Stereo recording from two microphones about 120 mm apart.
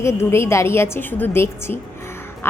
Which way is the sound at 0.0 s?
20° left (ahead or behind).